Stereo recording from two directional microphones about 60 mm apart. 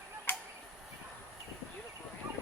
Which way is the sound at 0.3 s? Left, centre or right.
Left.